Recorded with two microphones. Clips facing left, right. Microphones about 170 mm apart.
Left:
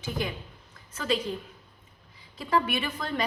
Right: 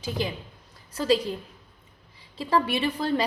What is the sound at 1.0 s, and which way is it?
Speech, 35° right (ahead or behind).